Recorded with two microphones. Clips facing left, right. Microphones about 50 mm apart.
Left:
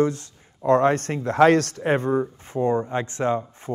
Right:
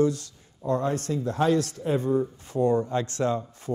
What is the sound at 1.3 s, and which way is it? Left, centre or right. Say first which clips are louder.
Speech: left 8 dB; left.